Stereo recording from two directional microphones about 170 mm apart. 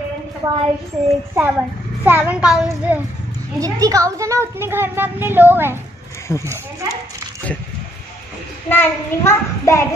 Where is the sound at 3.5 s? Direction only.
20° right (ahead or behind).